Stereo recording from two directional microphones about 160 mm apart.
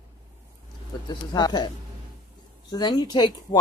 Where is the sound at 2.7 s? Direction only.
25° left (ahead or behind).